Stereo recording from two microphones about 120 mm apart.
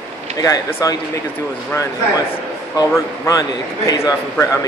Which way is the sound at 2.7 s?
30° left (ahead or behind).